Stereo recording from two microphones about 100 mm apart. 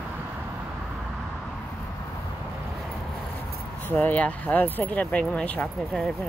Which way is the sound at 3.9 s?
15° left (ahead or behind).